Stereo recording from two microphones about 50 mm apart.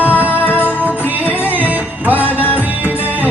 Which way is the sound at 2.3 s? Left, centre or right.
Left.